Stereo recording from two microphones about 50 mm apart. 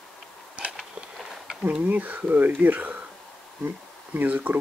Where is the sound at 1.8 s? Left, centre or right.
Right.